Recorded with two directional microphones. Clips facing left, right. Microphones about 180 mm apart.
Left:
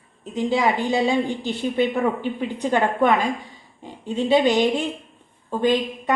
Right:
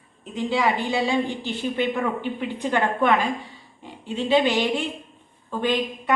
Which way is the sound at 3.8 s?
15° left (ahead or behind).